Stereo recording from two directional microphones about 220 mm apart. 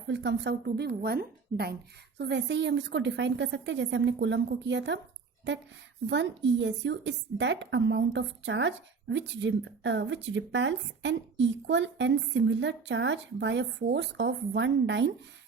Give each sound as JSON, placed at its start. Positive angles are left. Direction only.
{"t": 0.1, "sound": "a woman's voice", "side_deg": -55}
{"t": 6.1, "sound": "speech", "side_deg": -55}